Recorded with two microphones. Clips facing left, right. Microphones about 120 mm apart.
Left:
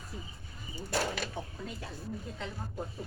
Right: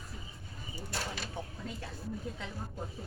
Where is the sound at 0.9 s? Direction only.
70° left (ahead or behind).